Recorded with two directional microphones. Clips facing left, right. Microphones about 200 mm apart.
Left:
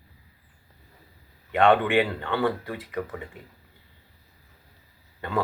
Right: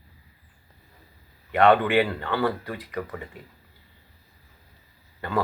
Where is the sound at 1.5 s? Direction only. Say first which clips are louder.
Right 1 dB; 20° left (ahead or behind).